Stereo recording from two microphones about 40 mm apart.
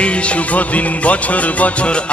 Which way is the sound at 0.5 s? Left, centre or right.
Left.